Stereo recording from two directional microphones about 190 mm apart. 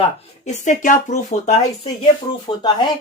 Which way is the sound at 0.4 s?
40° left (ahead or behind).